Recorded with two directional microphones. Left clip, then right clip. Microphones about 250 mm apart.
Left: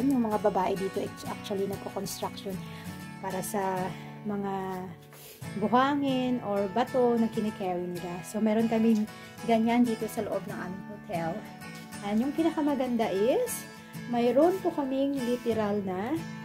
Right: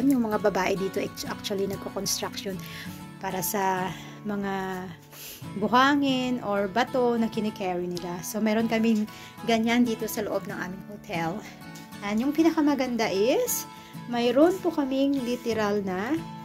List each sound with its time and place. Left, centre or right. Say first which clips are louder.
0.1 s speech: right 2 dB; centre
0.6 s speech: right 2 dB; centre
3.3 s speech: right 4 dB; centre